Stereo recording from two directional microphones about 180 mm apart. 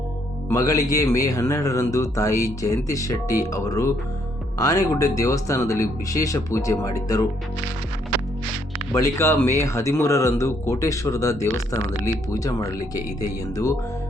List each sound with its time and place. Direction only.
0.4 s a man's voice: 20° left (ahead or behind)
8.9 s a man's voice: 15° left (ahead or behind)